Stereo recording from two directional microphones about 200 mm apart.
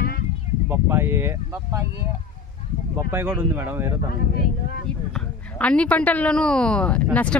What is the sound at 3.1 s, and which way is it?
Speech, 10° right (ahead or behind).